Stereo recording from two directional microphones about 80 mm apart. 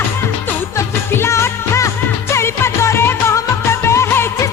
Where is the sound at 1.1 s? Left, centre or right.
Left.